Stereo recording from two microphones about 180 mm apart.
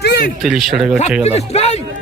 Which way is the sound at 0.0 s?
65° left (ahead or behind).